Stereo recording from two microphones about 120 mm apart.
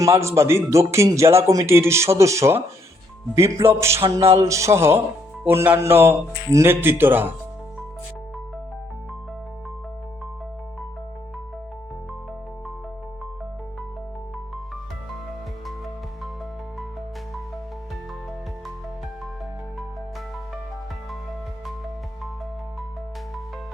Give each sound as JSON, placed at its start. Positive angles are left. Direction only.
{"t": 0.0, "sound": "a man's voice", "side_deg": -25}